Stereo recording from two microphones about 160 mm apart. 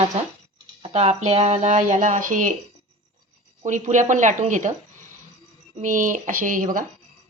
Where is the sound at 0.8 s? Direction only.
45° right (ahead or behind).